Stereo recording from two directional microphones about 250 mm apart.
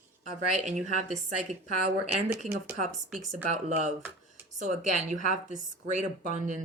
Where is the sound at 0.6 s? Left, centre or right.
Right.